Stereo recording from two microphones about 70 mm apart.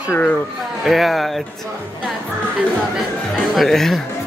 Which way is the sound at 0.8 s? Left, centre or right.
Centre.